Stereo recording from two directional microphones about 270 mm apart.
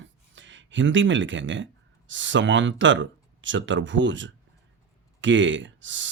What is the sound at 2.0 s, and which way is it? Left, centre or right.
Speech, right.